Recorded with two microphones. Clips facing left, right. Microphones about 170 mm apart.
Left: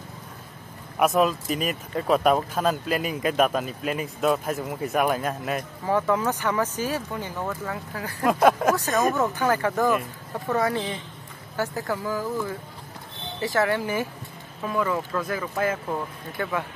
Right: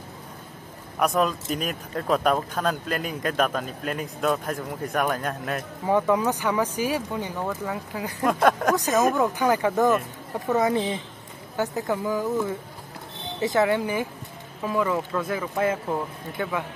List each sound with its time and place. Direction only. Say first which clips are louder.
0.9 s speech: left 2 dB; 5° left (ahead or behind)
5.9 s speech: right 2 dB; 15° right (ahead or behind)
8.2 s speech: left 2 dB; 5° left (ahead or behind)
9.3 s speech: right 1 dB; 15° right (ahead or behind)
15.2 s speech: right 1 dB; 20° right (ahead or behind)
15.9 s speech: right 2 dB; 10° right (ahead or behind)